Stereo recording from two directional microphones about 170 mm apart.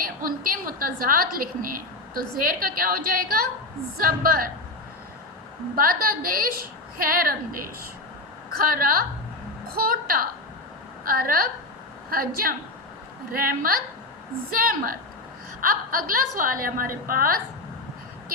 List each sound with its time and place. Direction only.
0.0 s a woman's voice: 55° right (ahead or behind)
5.7 s a woman's voice: 60° right (ahead or behind)